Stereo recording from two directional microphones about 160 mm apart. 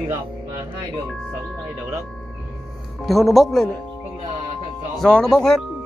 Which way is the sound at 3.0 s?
Centre (ahead or behind).